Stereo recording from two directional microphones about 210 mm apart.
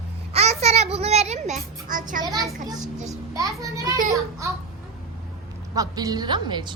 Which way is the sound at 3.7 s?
15° right (ahead or behind).